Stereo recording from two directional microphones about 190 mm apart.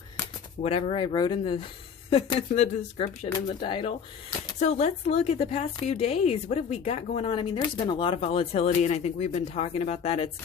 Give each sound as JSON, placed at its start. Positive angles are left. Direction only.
{"t": 0.6, "sound": "speech", "side_deg": 30}